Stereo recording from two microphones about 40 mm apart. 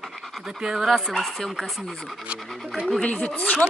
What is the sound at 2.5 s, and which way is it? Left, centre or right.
Scratch, centre.